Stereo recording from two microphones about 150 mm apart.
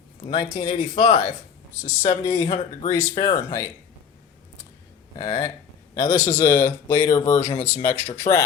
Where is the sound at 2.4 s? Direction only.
50° left (ahead or behind).